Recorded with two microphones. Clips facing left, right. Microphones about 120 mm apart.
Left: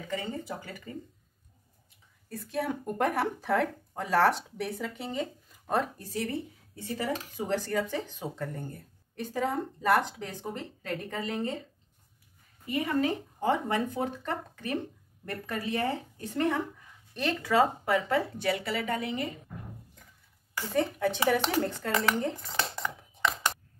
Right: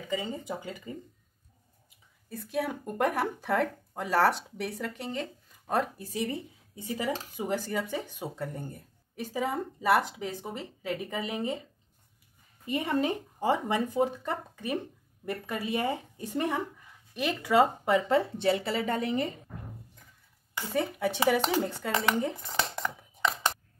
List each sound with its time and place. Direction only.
0.1 s speech: 15° right (ahead or behind)
2.2 s speech: centre (ahead or behind)
6.7 s speech: 15° right (ahead or behind)
12.6 s speech: 25° right (ahead or behind)
13.4 s speech: 10° right (ahead or behind); by 19.3 s 30° right (ahead or behind)
20.7 s speech: 5° right (ahead or behind)